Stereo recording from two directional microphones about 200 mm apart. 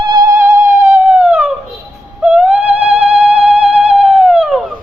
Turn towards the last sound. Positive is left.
turn(degrees=0)  # may be behind; listen again after turning